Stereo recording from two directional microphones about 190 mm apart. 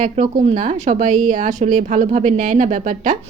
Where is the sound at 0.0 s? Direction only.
40° right (ahead or behind).